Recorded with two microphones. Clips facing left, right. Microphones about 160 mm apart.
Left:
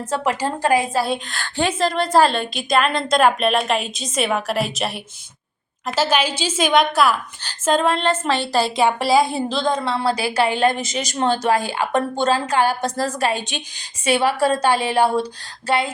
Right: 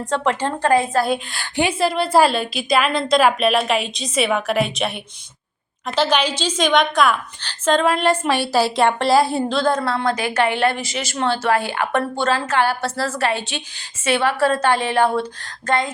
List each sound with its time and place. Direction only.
0.1 s a woman's voice: 10° left (ahead or behind)
1.0 s a woman's voice: 5° right (ahead or behind)
7.9 s a woman's voice: 10° right (ahead or behind)
9.8 s a woman's voice: 30° left (ahead or behind)
10.2 s a woman's voice: 10° left (ahead or behind)